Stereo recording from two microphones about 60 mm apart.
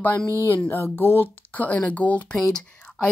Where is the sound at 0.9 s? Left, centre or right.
Left.